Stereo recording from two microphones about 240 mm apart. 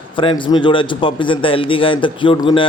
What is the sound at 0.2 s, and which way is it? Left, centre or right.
A man's voice, left.